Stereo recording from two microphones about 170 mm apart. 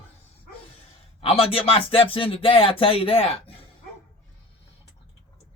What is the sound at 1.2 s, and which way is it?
Speech, 35° left (ahead or behind).